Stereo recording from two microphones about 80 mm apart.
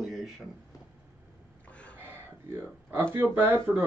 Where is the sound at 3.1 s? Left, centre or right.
Right.